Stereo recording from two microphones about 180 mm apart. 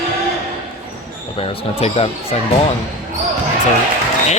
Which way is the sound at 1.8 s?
35° left (ahead or behind).